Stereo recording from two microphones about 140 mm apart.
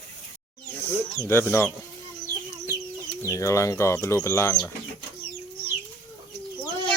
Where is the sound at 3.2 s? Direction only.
20° left (ahead or behind).